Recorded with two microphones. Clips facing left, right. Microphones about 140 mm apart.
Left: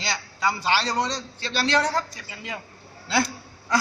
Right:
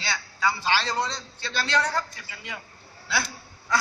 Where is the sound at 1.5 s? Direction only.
35° left (ahead or behind).